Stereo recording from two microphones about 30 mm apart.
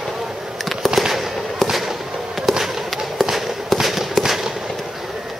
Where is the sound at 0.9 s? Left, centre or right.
Centre.